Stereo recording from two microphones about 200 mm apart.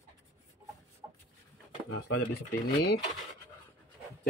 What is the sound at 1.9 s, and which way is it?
Speech, 70° left (ahead or behind).